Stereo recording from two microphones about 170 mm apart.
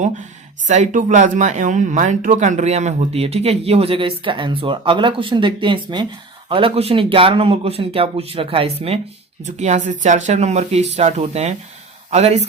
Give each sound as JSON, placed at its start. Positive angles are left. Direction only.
{"t": 0.7, "sound": "speech", "side_deg": -45}